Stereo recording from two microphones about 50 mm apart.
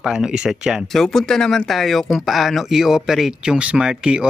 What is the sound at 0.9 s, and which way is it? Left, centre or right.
Speech, centre.